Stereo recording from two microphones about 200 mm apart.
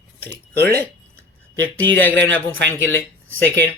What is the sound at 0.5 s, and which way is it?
Speech, 50° right (ahead or behind).